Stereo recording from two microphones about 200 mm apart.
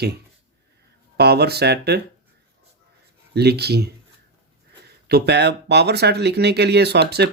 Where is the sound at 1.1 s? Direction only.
55° right (ahead or behind).